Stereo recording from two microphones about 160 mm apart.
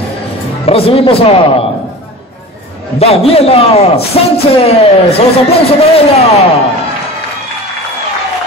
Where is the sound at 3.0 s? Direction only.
40° left (ahead or behind).